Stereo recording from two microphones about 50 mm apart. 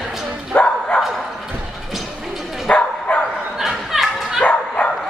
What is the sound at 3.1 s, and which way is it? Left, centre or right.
Dog, left.